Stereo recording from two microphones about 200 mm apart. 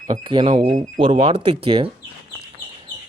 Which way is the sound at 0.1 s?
25° right (ahead or behind).